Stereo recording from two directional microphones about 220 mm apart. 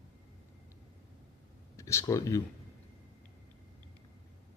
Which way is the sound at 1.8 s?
15° left (ahead or behind).